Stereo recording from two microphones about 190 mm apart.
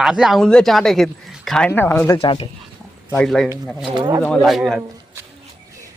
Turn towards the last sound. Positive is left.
turn(degrees=0)  # may be behind; listen again after turning